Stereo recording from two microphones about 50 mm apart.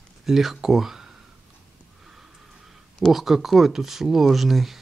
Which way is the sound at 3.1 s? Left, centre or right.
Centre.